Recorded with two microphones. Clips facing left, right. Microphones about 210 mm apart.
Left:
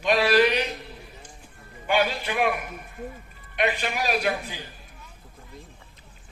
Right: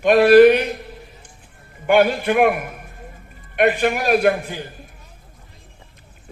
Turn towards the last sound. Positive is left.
turn(degrees=-55)  # may be behind; listen again after turning